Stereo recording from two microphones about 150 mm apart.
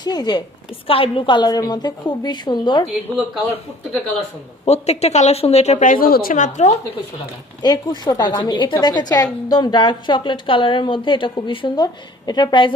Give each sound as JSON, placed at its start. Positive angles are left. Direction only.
{"t": 0.0, "sound": "a woman's voice", "side_deg": 30}
{"t": 0.8, "sound": "a woman's voice", "side_deg": 40}
{"t": 4.6, "sound": "a woman's voice", "side_deg": 45}
{"t": 7.6, "sound": "a woman's voice", "side_deg": 25}